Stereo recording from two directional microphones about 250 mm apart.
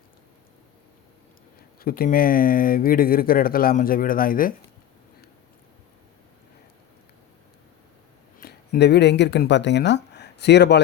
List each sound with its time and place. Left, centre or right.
1.8 s speech: left
8.4 s speech: left